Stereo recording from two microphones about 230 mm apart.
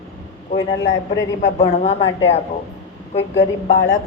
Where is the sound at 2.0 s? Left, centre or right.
Left.